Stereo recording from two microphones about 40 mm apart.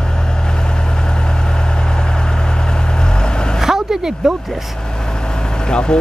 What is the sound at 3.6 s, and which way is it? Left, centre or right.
Vehicle, centre.